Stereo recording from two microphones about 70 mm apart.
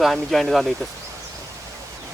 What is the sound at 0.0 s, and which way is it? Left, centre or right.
Speech, centre.